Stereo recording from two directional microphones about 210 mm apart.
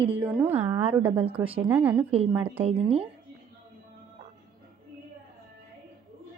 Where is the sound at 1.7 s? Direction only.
10° right (ahead or behind).